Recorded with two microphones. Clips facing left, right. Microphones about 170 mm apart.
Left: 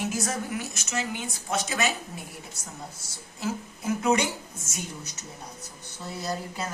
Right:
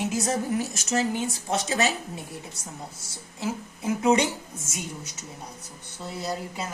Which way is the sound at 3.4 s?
15° right (ahead or behind).